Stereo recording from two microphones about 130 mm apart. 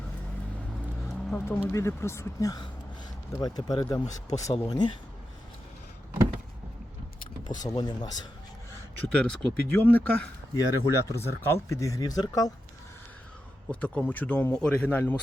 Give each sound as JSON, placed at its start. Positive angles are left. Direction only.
{"t": 1.5, "sound": "speech", "side_deg": 20}
{"t": 7.4, "sound": "speech", "side_deg": 30}
{"t": 9.1, "sound": "speech", "side_deg": 10}
{"t": 10.5, "sound": "speech", "side_deg": 25}
{"t": 13.7, "sound": "speech", "side_deg": 10}